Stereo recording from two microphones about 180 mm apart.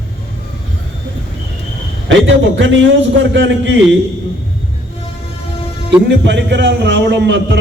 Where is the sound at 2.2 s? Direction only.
90° right.